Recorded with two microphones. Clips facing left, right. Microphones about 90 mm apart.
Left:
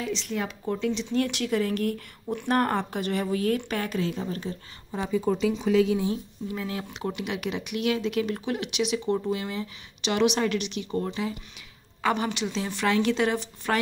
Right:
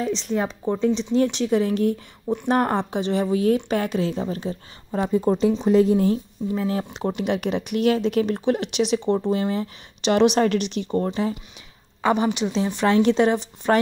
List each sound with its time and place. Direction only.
0.0 s speech: 35° right (ahead or behind)
4.9 s speech: 45° right (ahead or behind)
5.3 s speech: 35° right (ahead or behind)
6.5 s speech: 30° right (ahead or behind)
12.0 s speech: 20° right (ahead or behind)